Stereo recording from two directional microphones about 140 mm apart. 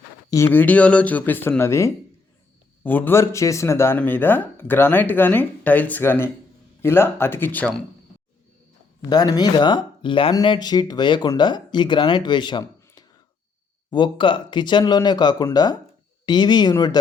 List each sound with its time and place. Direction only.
0.3 s speech: 20° left (ahead or behind)
9.0 s speech: 30° left (ahead or behind)